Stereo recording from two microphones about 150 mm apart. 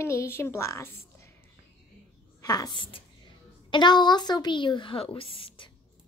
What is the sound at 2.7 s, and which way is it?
A woman's voice, 35° left (ahead or behind).